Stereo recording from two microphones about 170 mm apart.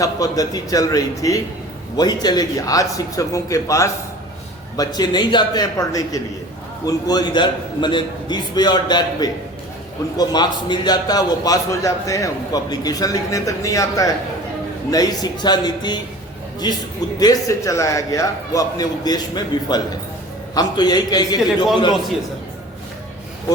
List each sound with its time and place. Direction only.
0.0 s a man's voice: 20° left (ahead or behind)